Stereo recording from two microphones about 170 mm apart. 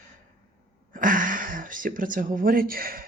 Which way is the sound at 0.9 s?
50° right (ahead or behind).